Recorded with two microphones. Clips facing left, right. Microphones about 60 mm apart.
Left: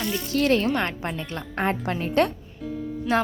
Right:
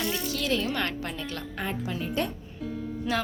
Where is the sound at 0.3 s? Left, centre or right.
Left.